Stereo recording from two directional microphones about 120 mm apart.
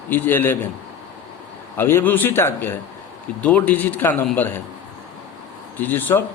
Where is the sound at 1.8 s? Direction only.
20° left (ahead or behind).